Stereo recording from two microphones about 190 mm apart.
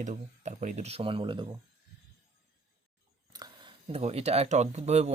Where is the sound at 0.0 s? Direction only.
40° right (ahead or behind); by 1.5 s 25° right (ahead or behind).